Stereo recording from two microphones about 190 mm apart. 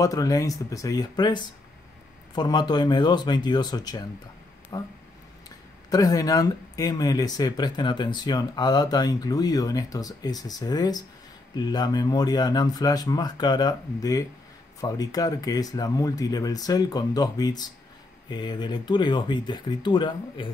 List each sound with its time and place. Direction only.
0.0 s speech: 15° left (ahead or behind)